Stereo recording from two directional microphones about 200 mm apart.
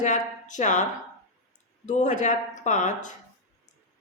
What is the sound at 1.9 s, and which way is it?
Speech, 40° left (ahead or behind).